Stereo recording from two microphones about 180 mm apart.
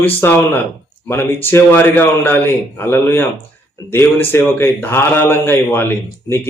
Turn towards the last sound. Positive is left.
turn(degrees=10)  # may be behind; listen again after turning